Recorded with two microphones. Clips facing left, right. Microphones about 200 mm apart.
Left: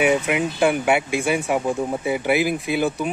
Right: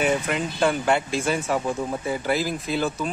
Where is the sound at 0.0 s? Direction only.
15° left (ahead or behind).